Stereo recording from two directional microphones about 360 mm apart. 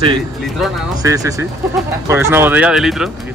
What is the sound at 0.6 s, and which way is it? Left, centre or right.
Speech, centre.